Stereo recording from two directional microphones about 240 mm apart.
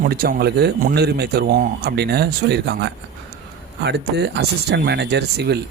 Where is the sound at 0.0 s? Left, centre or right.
Right.